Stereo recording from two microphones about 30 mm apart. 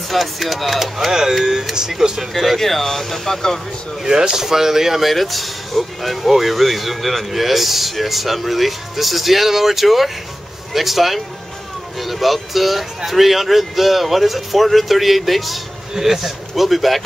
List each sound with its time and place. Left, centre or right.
0.1 s speech: centre
0.9 s speech: centre
2.3 s speech: centre
4.0 s speech: right
5.0 s speech: centre